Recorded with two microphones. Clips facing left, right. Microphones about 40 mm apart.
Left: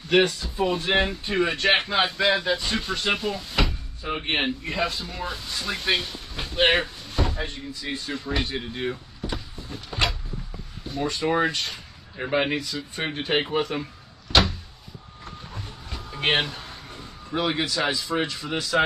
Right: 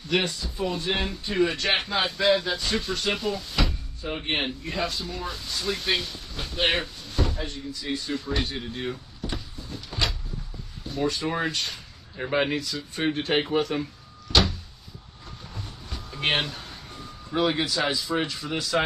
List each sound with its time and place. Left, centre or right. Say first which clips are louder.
0.1 s speech: left 6 dB; left
1.3 s speech: left 2 dB; centre
3.6 s a sound: left 3 dB; left
4.0 s speech: left 2 dB; centre
4.7 s speech: right 1 dB; left
8.3 s speech: left 1 dB; centre
9.7 s cupboard open or close: left 3 dB; left
11.0 s speech: left 3 dB; centre
14.3 s door: left 2 dB; centre
16.2 s speech: left 2 dB; centre